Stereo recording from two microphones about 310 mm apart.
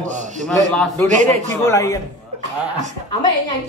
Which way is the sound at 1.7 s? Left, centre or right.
Centre.